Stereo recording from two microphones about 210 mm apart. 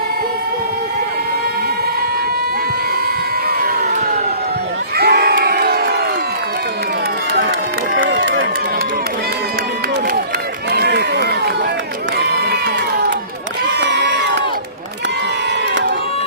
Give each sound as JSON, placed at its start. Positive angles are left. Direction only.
{"t": 4.9, "sound": "crowd", "side_deg": -50}
{"t": 8.1, "sound": "run", "side_deg": -65}
{"t": 10.7, "sound": "run", "side_deg": -50}
{"t": 12.2, "sound": "crowd", "side_deg": -50}
{"t": 13.7, "sound": "crowd", "side_deg": -55}